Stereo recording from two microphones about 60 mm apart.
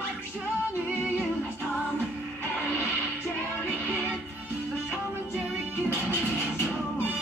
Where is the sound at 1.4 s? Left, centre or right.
Left.